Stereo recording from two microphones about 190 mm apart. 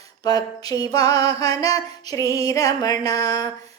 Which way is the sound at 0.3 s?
20° left (ahead or behind).